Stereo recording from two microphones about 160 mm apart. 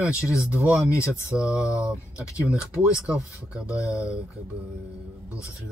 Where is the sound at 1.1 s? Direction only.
5° right (ahead or behind).